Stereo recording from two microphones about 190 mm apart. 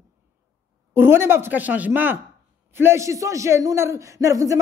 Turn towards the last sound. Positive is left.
turn(degrees=-15)  # may be behind; listen again after turning